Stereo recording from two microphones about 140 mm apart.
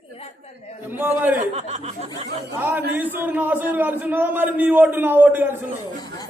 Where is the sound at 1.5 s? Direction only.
50° right (ahead or behind).